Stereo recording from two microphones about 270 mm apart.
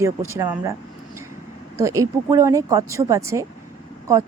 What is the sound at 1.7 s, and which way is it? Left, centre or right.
Speech, centre.